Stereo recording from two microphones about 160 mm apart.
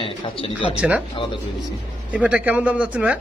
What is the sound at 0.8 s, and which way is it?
Speech, 5° right (ahead or behind).